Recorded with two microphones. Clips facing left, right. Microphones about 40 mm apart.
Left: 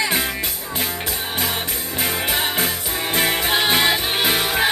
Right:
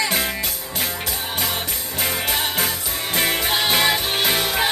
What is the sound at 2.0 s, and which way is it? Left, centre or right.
Music, centre.